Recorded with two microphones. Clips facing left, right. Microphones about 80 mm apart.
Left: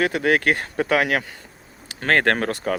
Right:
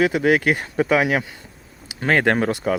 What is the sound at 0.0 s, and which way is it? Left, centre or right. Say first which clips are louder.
Speech: right 2 dB; centre.